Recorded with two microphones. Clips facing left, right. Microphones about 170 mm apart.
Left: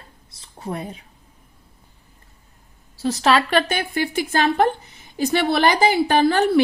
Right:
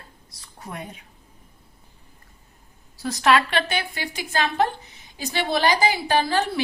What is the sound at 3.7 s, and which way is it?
A woman's voice, 50° left (ahead or behind).